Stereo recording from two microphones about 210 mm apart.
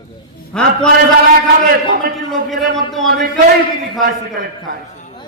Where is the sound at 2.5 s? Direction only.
Centre (ahead or behind).